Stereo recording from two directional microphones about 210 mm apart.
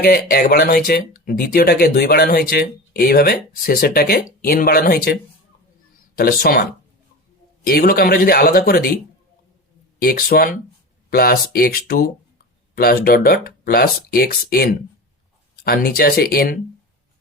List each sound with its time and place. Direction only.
0.0 s speech: 45° left (ahead or behind)
6.1 s speech: 40° left (ahead or behind)
7.7 s speech: 45° left (ahead or behind)
10.0 s speech: 40° left (ahead or behind)